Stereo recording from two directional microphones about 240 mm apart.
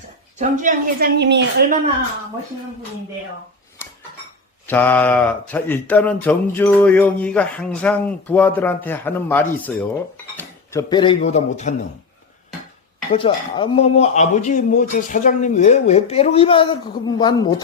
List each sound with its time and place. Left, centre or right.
0.3 s speech: right
3.8 s dishes: centre
4.6 s speech: centre; by 11.7 s left
13.1 s speech: left